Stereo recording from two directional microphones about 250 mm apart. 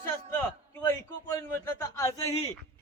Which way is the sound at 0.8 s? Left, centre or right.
Centre.